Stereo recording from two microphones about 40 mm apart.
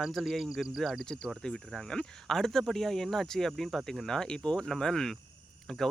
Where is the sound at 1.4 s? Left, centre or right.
Centre.